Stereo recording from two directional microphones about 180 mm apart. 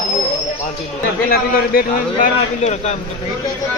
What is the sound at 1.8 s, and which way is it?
A man's voice, 45° left (ahead or behind).